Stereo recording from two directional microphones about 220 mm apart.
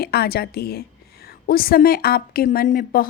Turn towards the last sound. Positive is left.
turn(degrees=40)  # may be behind; listen again after turning